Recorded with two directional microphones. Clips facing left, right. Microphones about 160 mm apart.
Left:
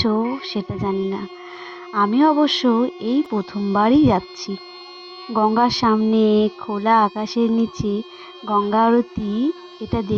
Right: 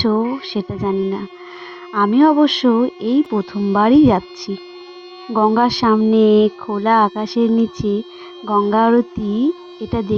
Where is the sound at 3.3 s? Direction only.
70° right (ahead or behind).